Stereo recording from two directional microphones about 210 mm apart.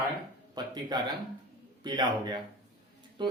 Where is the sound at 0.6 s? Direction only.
20° right (ahead or behind).